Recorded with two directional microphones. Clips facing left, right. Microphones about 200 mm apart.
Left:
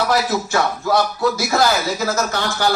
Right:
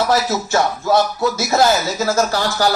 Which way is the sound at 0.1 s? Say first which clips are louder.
Right 1 dB; 25° right (ahead or behind).